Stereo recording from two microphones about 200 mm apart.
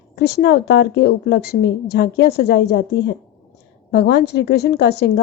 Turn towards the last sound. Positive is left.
turn(degrees=55)  # may be behind; listen again after turning